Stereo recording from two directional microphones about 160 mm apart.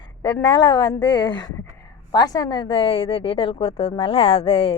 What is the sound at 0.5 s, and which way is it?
A woman's voice, 25° left (ahead or behind).